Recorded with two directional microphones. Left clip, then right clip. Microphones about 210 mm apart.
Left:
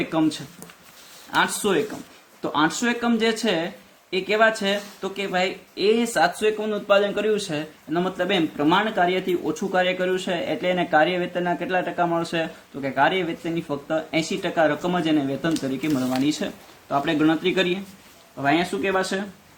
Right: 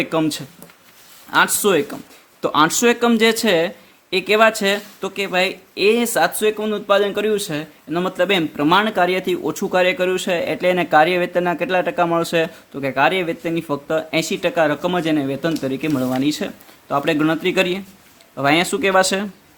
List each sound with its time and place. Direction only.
0.0 s speech: 40° right (ahead or behind)
18.4 s speech: 50° right (ahead or behind)